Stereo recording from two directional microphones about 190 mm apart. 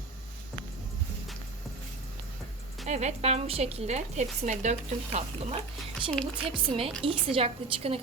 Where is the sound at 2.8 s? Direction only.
35° right (ahead or behind).